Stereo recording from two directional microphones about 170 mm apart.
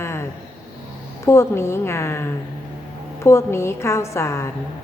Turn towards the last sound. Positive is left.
turn(degrees=15)  # may be behind; listen again after turning